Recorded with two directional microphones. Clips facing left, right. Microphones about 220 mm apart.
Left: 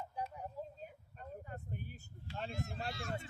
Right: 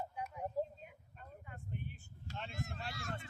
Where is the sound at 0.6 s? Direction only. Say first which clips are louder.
Right 9 dB; 40° right (ahead or behind).